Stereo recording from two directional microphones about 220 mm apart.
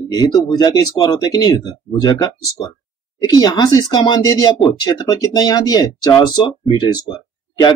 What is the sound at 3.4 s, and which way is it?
Speech, 15° left (ahead or behind).